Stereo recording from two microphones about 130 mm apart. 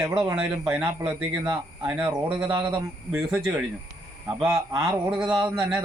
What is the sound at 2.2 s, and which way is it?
Speech, 45° right (ahead or behind).